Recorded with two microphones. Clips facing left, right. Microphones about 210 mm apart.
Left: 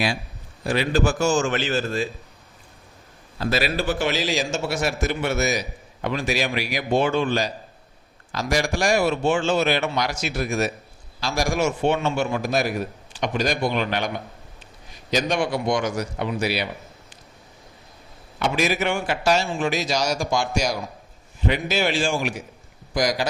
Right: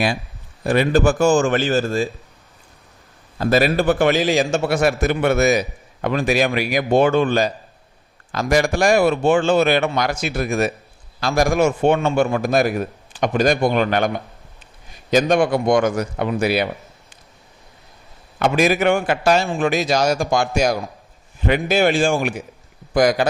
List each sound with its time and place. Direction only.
0.6 s a man's voice: 55° right (ahead or behind)
3.3 s a man's voice: 50° right (ahead or behind)
15.1 s a man's voice: 50° right (ahead or behind)
18.3 s a man's voice: 50° right (ahead or behind)